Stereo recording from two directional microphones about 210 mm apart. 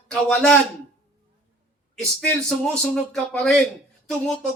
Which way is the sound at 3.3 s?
5° left (ahead or behind).